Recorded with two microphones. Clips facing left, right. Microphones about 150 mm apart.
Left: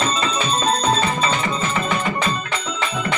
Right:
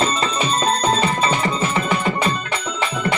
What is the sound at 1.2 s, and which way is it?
Music, 30° right (ahead or behind).